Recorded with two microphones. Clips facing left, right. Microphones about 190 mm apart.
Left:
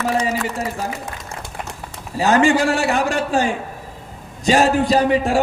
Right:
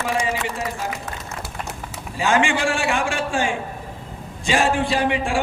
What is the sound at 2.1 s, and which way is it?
A man's voice, 40° left (ahead or behind).